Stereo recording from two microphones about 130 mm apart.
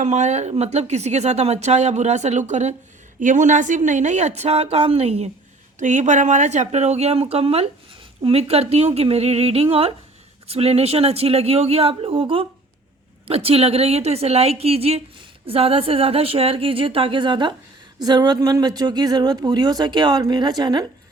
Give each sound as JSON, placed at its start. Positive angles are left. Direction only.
{"t": 0.0, "sound": "a woman's voice", "side_deg": -60}
{"t": 3.2, "sound": "a woman's voice", "side_deg": -75}
{"t": 5.8, "sound": "a woman's voice", "side_deg": -70}